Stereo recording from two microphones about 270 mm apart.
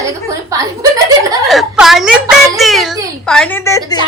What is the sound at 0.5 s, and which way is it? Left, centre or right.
Chuckle, centre.